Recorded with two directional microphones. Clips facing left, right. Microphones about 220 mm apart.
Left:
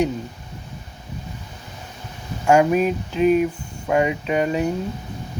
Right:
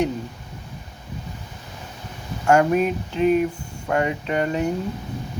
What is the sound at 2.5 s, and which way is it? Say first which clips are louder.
Speech: left 1 dB; 15° left (ahead or behind).